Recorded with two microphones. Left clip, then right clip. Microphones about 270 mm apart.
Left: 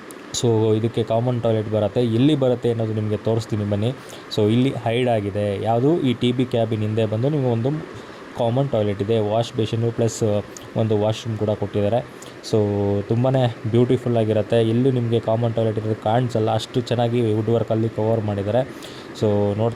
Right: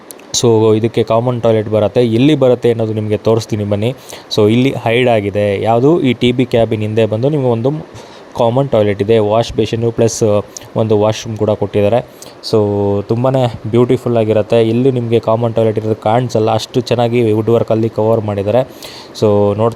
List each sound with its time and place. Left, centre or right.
0.3 s speech: right